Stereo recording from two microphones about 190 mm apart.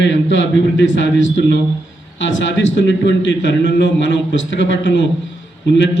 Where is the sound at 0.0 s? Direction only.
70° left (ahead or behind).